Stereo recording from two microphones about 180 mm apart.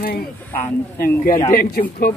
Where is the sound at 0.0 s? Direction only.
55° left (ahead or behind).